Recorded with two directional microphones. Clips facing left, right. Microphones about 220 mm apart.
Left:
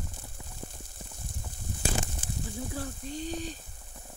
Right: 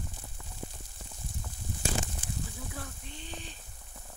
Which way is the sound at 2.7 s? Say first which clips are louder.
Left 7 dB; 30° left (ahead or behind).